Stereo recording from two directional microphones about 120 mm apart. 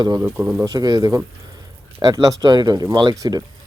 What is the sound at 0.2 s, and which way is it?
Speech, 25° right (ahead or behind).